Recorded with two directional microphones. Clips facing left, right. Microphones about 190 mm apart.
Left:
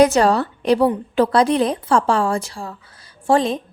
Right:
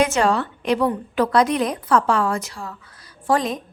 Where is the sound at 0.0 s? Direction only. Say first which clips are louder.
Left 5 dB; 35° left (ahead or behind).